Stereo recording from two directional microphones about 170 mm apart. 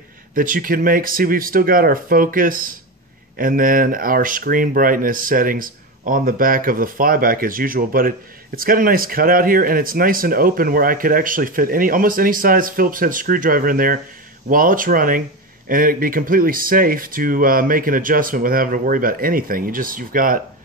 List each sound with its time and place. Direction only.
0.3 s speech: 55° right (ahead or behind)